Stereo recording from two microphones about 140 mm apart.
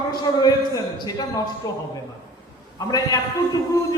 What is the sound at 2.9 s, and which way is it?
Speech, 25° left (ahead or behind).